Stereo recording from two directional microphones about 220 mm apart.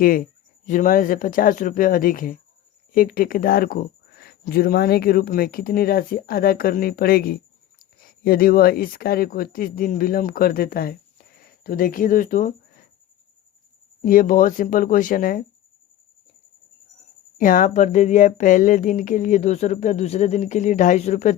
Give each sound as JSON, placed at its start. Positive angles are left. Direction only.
{"t": 0.0, "sound": "speech", "side_deg": 40}
{"t": 14.0, "sound": "speech", "side_deg": 40}
{"t": 17.3, "sound": "speech", "side_deg": 35}